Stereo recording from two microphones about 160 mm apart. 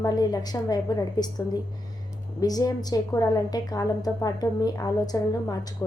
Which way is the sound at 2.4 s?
25° left (ahead or behind).